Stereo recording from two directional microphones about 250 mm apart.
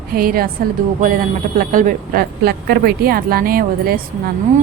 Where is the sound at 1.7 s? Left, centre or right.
Right.